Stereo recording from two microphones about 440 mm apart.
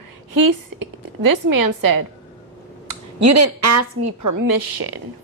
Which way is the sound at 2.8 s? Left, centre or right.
Right.